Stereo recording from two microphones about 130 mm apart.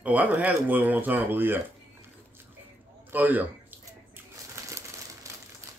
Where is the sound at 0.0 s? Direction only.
10° right (ahead or behind).